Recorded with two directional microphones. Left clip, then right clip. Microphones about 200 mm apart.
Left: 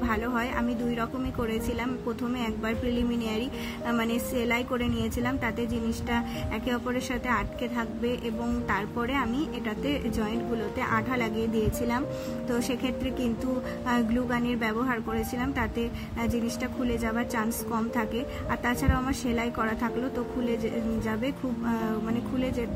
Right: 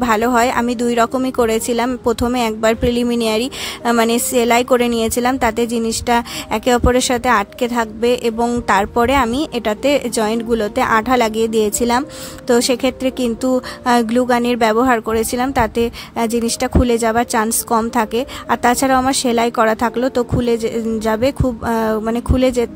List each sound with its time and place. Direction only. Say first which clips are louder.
0.0 s speech: right 15 dB; 55° right (ahead or behind)
12.4 s a woman's voice: right 17 dB; 50° right (ahead or behind)